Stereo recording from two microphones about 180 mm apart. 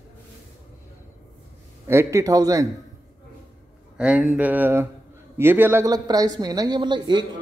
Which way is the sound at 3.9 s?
5° right (ahead or behind).